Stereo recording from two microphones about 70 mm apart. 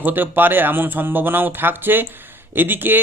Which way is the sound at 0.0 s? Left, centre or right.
Right.